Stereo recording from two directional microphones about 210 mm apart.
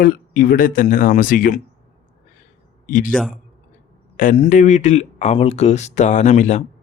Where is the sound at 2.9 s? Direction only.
40° left (ahead or behind).